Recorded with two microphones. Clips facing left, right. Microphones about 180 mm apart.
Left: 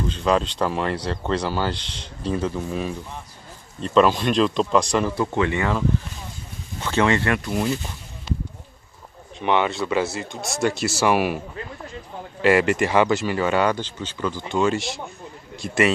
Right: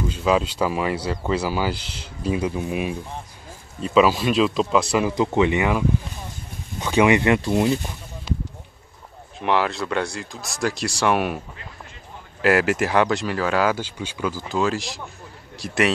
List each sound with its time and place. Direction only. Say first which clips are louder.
0.0 s speech: even; 5° right (ahead or behind)
5.1 s speech: right 3 dB; 20° right (ahead or behind)
9.4 s speech: left 1 dB; centre (ahead or behind)